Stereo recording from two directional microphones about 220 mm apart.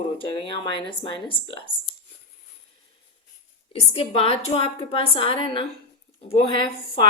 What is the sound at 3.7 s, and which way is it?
A woman's voice, 25° left (ahead or behind).